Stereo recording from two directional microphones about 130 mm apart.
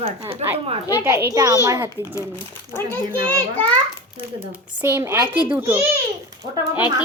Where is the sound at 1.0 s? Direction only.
20° right (ahead or behind).